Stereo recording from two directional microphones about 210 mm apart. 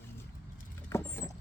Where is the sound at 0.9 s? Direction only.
15° left (ahead or behind).